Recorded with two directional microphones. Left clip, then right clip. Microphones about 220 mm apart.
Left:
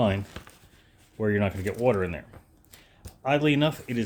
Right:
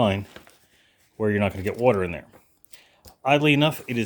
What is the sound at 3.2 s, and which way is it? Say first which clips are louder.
Speech: right 4 dB; 35° right (ahead or behind).